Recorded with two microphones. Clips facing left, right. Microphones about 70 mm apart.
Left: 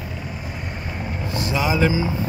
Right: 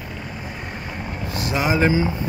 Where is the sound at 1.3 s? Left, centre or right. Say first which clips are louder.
Right 1 dB; right.